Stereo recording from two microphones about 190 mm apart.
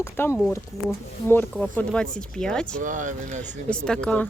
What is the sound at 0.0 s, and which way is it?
Speech, 15° left (ahead or behind).